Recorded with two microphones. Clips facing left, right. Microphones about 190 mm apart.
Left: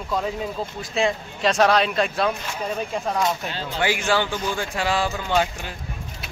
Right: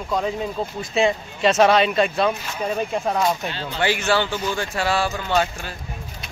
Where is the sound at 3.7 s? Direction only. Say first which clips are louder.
Right 1 dB; 10° left (ahead or behind).